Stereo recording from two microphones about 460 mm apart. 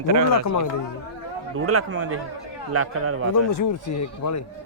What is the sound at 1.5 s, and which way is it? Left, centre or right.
A man's voice, right.